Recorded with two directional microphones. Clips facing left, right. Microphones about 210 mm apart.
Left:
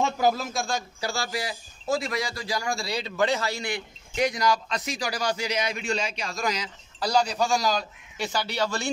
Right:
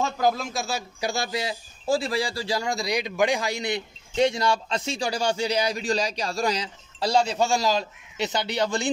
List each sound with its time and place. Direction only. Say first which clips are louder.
0.2 s a man's voice: even; centre (ahead or behind)
1.1 s a man's voice: right 1 dB; 20° right (ahead or behind)